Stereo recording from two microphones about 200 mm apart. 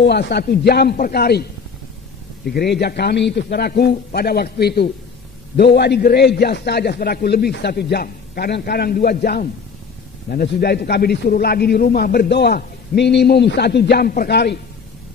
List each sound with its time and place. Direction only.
0.0 s a man's voice: 55° left (ahead or behind)